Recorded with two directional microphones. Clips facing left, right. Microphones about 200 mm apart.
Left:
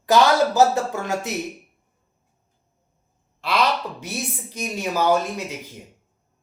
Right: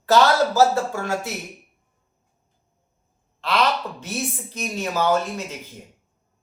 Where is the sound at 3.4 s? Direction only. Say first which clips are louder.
Even; 10° left (ahead or behind).